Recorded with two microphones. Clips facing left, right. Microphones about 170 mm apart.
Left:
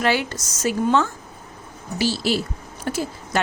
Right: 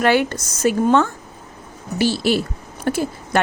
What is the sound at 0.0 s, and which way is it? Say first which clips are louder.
A woman's voice: right 5 dB; 55° right (ahead or behind).